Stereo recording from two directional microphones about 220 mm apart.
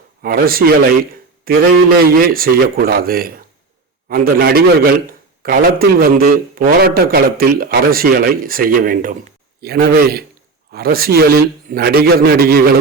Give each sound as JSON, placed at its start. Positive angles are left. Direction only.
{"t": 0.2, "sound": "a man's voice", "side_deg": -40}